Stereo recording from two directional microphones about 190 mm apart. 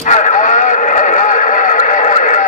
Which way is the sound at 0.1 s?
40° left (ahead or behind).